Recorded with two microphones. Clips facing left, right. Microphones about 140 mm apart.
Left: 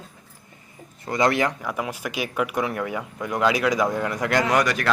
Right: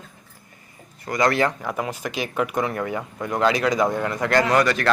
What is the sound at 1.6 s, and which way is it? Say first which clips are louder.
Speech: right 1 dB; 5° left (ahead or behind).